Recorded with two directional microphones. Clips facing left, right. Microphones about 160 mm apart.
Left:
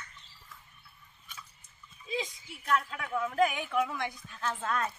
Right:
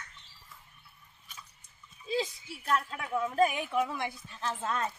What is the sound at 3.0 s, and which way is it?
Speech, 15° right (ahead or behind).